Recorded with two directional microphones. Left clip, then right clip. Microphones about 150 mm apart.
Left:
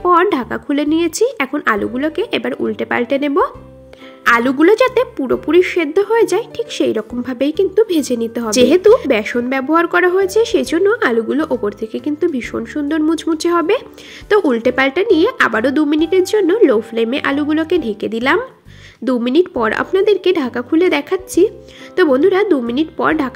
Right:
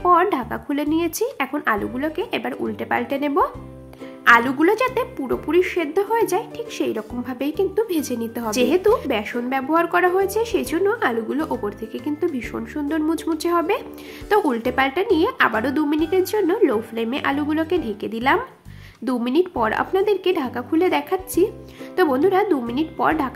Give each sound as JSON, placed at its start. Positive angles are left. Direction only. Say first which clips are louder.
{"t": 0.0, "sound": "a woman's voice", "louder": "left 4 dB", "side_deg": 25}